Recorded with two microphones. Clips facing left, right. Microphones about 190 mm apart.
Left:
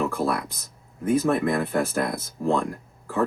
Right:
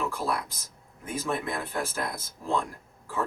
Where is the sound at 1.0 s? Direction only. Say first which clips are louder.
Left 10 dB; 60° left (ahead or behind).